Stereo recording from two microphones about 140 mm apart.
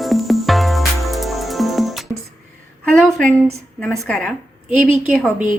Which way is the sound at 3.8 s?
5° left (ahead or behind).